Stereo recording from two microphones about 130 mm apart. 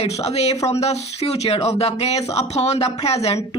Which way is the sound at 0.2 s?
55° left (ahead or behind).